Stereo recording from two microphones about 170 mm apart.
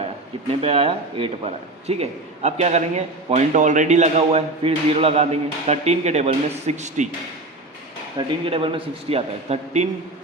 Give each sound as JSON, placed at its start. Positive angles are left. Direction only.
{"t": 0.6, "sound": "a man's voice", "side_deg": -35}
{"t": 8.4, "sound": "a man's voice", "side_deg": -30}